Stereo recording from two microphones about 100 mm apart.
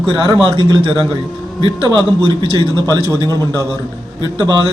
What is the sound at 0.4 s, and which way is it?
Speech, 60° right (ahead or behind).